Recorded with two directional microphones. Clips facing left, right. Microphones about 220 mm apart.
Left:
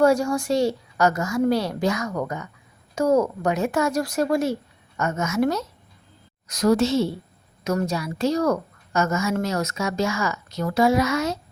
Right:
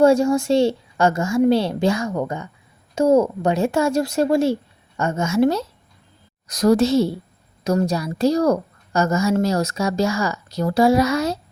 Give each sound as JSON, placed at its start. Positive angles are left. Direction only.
{"t": 0.0, "sound": "a woman's voice", "side_deg": -25}